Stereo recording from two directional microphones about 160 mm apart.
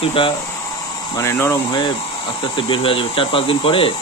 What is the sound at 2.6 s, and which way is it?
Speech, 35° left (ahead or behind).